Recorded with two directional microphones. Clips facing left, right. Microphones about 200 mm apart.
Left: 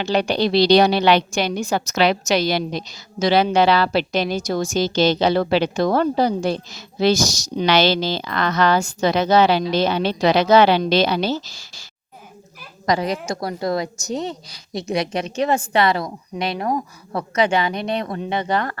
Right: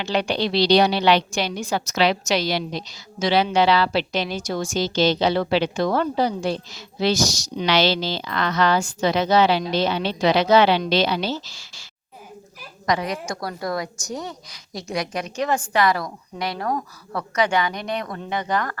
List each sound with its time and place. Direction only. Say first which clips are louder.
0.0 s a woman's voice: left 4 dB; 40° left (ahead or behind)